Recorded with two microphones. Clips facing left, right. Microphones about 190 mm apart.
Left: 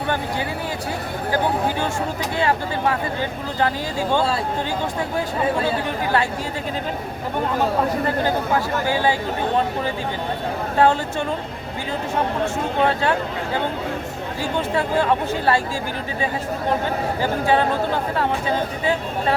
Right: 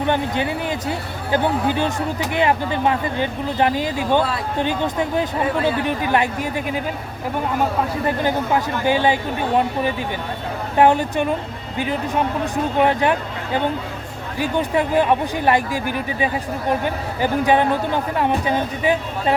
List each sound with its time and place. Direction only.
1.3 s speech: 20° right (ahead or behind)
8.0 s speech: 20° right (ahead or behind)
10.8 s speech: 15° right (ahead or behind)
12.8 s speech: 15° right (ahead or behind)
14.3 s speech: 15° right (ahead or behind)
16.8 s speech: 15° right (ahead or behind)